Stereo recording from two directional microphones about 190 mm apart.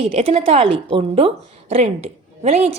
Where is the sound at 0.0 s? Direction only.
30° right (ahead or behind).